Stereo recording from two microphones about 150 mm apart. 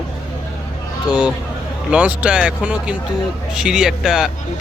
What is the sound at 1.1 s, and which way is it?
Speech, 5° right (ahead or behind).